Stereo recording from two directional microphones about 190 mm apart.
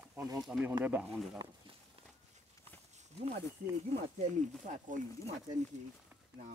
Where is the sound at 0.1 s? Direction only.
15° right (ahead or behind).